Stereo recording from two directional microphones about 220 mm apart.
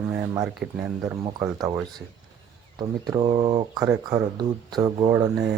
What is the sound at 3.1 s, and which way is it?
Speech, 20° right (ahead or behind).